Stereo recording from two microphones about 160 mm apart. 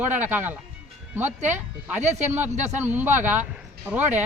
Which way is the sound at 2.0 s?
45° right (ahead or behind).